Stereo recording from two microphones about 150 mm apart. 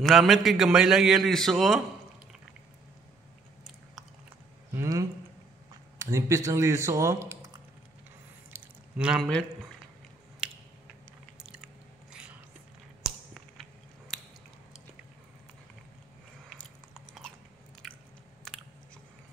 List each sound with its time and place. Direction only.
0.0 s a man's voice: centre (ahead or behind)
4.7 s speech: 20° right (ahead or behind)
8.5 s squish: 5° right (ahead or behind)
11.3 s biting: 5° right (ahead or behind)
13.0 s a sound: centre (ahead or behind)
16.4 s biting: 5° left (ahead or behind)